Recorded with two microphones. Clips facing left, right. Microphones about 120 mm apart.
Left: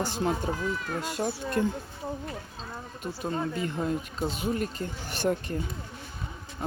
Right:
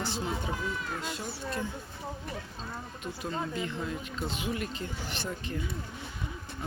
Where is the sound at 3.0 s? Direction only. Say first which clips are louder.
Left 4 dB; 40° left (ahead or behind).